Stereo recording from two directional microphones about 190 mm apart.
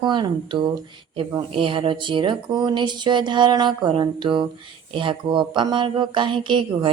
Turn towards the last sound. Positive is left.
turn(degrees=-25)  # may be behind; listen again after turning